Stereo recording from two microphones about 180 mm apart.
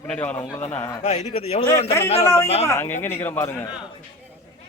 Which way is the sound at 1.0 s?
35° left (ahead or behind).